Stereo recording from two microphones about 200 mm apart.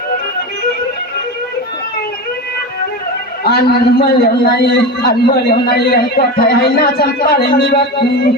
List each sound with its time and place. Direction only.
3.4 s a man's voice: 55° left (ahead or behind)